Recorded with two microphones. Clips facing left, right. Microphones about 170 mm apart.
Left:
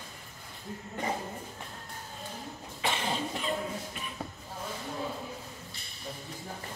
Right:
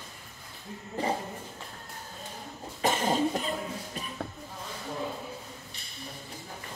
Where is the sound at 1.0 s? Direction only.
30° right (ahead or behind).